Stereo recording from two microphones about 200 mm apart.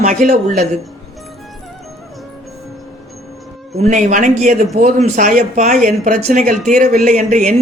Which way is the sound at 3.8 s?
35° right (ahead or behind).